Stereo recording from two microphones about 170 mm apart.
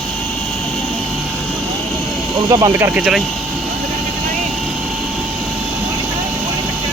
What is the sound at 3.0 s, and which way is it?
Speech, 5° right (ahead or behind).